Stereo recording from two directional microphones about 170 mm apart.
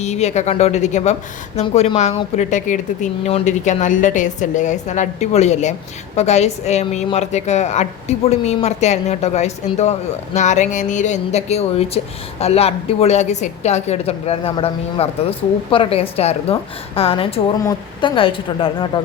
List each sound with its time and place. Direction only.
0.0 s a woman's voice: 40° left (ahead or behind)